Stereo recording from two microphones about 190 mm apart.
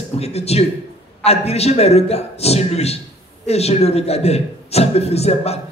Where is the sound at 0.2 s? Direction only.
35° left (ahead or behind).